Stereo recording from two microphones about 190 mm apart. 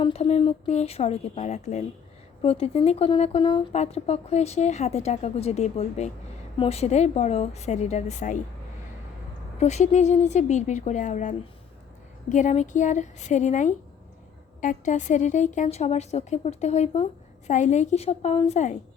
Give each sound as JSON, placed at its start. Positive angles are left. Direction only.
{"t": 0.0, "sound": "a woman's voice", "side_deg": 30}
{"t": 9.6, "sound": "a woman's voice", "side_deg": 35}